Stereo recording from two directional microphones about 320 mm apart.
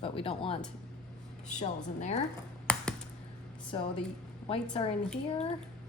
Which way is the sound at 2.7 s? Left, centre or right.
Centre.